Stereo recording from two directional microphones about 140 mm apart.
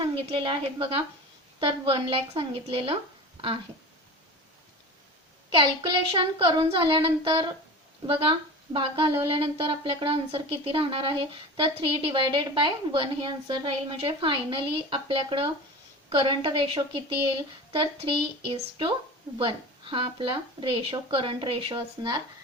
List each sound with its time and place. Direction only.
0.0 s speech: 35° right (ahead or behind)
5.5 s speech: 35° right (ahead or behind)